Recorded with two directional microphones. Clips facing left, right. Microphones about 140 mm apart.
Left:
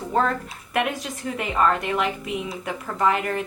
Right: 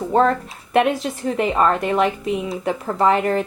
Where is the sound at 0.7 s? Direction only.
30° right (ahead or behind).